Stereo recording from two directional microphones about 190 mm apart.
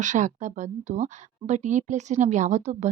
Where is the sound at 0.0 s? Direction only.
40° right (ahead or behind).